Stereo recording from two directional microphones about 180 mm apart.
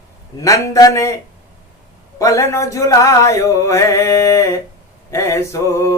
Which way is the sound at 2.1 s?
15° left (ahead or behind).